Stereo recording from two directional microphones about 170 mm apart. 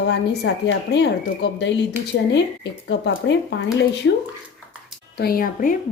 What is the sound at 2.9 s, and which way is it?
Speech, 90° left.